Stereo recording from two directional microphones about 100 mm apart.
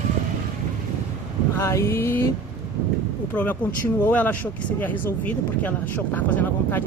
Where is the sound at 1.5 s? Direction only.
30° left (ahead or behind).